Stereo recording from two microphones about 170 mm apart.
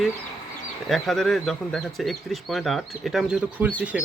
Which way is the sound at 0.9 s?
Centre (ahead or behind).